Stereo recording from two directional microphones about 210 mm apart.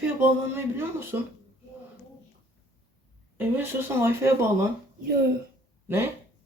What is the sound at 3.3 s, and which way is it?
Speech, 10° right (ahead or behind).